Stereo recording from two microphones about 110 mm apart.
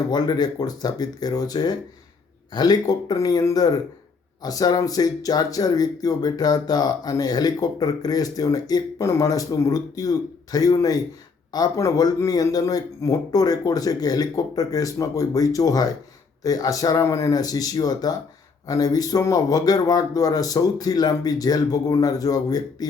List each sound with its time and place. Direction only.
0.1 s speech: 40° left (ahead or behind)